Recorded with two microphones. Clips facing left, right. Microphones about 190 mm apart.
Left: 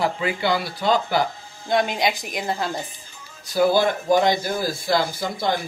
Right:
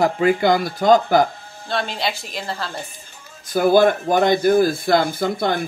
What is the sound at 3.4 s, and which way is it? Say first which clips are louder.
Speech: right 4 dB; 50° right (ahead or behind).